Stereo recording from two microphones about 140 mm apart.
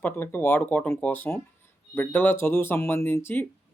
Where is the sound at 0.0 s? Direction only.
15° left (ahead or behind).